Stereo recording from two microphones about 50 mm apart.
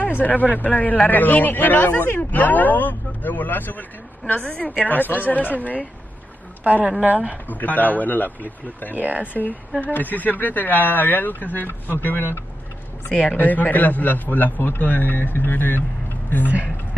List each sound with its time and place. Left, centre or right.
0.0 s speech: left
4.3 s a woman's voice: left
4.8 s speech: left
6.6 s speech: right
7.4 s speech: left
8.9 s speech: right
9.3 s speech: left
13.1 s a woman's voice: left
13.4 s speech: left